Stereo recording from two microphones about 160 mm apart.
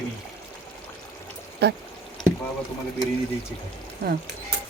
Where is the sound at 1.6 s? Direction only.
90° right.